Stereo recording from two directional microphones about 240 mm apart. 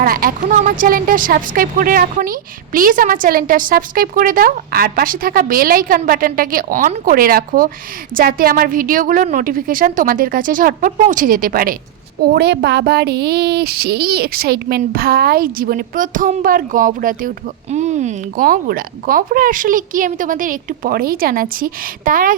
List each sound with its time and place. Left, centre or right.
0.0 s speech: right